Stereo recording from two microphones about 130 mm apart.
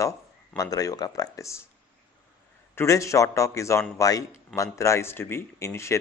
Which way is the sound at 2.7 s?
25° left (ahead or behind).